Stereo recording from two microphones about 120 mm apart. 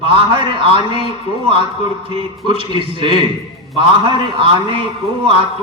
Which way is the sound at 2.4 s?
45° right (ahead or behind).